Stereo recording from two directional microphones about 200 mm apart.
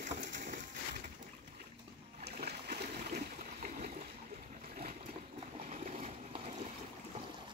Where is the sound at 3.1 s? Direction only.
50° right (ahead or behind).